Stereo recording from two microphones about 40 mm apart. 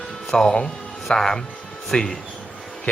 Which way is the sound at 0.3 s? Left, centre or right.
Centre.